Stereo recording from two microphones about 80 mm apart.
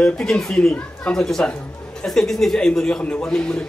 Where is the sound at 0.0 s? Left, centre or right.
Centre.